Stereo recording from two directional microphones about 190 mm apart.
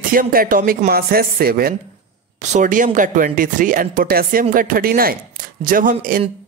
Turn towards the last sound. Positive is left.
turn(degrees=-45)  # may be behind; listen again after turning